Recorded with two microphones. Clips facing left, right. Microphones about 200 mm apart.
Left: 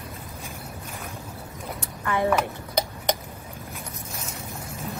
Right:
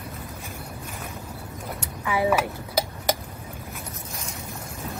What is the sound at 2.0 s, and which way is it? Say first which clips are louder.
Dishes: right 1 dB; 5° right (ahead or behind).